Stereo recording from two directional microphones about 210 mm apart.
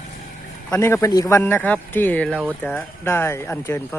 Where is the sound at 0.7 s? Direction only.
15° left (ahead or behind).